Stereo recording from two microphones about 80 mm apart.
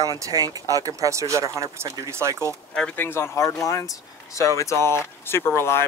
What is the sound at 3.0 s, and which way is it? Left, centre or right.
Speech, left.